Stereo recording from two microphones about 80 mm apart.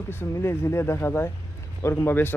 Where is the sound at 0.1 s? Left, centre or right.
Left.